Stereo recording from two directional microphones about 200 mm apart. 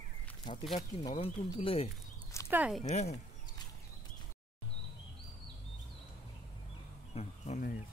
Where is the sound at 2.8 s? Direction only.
35° left (ahead or behind).